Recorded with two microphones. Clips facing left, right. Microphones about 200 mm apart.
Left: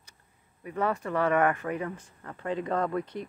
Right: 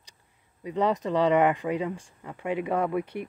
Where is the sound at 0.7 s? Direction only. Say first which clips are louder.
Right 4 dB; 15° right (ahead or behind).